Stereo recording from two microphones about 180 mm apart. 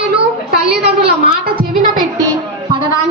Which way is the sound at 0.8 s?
60° right (ahead or behind).